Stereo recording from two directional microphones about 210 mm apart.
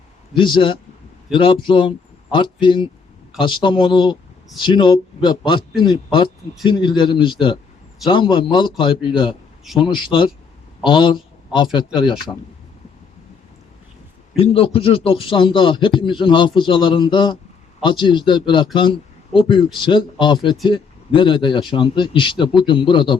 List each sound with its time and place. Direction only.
0.3 s a man's voice: 25° left (ahead or behind)
14.3 s speech: 25° left (ahead or behind)